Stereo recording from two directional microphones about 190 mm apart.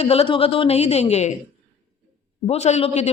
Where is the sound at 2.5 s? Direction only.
35° left (ahead or behind).